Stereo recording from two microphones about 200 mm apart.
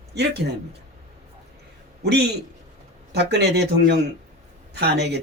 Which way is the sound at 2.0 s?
55° right (ahead or behind).